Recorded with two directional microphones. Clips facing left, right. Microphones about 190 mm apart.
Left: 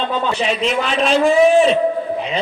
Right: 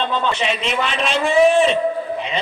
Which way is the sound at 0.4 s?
40° left (ahead or behind).